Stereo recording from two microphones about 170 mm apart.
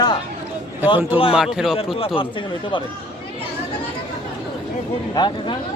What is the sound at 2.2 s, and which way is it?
Speech, 30° left (ahead or behind).